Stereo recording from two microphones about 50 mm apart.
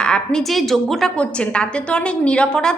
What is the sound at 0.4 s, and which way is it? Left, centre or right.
Speech, centre.